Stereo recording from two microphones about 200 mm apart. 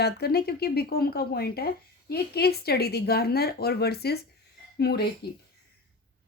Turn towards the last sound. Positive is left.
turn(degrees=55)  # may be behind; listen again after turning